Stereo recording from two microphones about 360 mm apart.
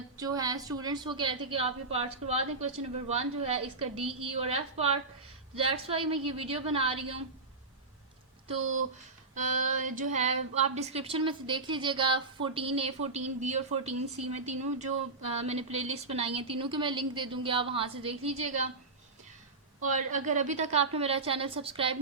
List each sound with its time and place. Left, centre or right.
0.2 s a woman's voice: centre
9.3 s a woman's voice: right
19.8 s a woman's voice: right